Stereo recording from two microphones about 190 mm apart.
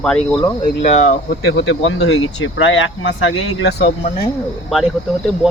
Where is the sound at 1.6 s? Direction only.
90° left.